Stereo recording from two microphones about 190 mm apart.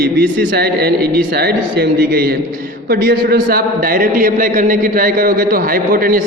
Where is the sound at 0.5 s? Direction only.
55° right (ahead or behind).